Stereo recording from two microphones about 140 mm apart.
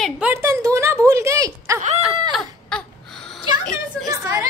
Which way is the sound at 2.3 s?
5° left (ahead or behind).